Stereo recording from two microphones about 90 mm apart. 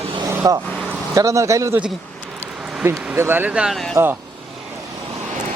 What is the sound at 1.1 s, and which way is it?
Speech, 35° right (ahead or behind).